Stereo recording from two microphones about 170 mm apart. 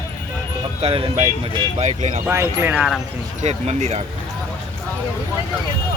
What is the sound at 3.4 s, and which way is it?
Speech, 40° right (ahead or behind).